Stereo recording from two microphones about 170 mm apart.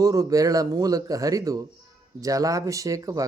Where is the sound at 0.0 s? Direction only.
20° right (ahead or behind).